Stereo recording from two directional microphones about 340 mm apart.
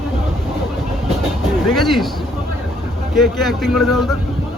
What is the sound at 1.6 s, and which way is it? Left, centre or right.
Speech, centre.